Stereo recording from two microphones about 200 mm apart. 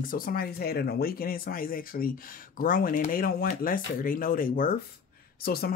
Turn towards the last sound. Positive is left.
turn(degrees=50)  # may be behind; listen again after turning